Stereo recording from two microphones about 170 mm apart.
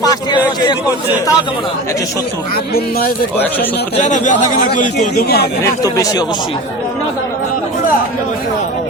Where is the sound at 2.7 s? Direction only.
60° left (ahead or behind).